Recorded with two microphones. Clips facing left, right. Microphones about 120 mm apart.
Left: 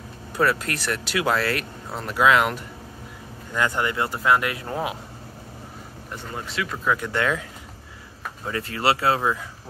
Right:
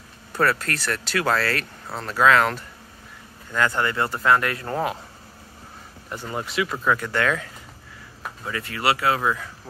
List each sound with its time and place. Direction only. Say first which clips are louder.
0.4 s speech: even; 15° left (ahead or behind)
6.3 s speech: right 4 dB; 15° right (ahead or behind)
7.0 s speech: right 1 dB; 15° left (ahead or behind)
8.5 s speech: left 1 dB; 30° left (ahead or behind)